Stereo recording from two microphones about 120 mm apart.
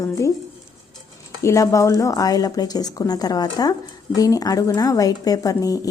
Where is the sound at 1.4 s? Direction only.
25° left (ahead or behind).